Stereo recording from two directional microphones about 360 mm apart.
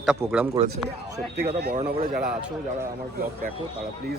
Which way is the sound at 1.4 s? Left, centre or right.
Right.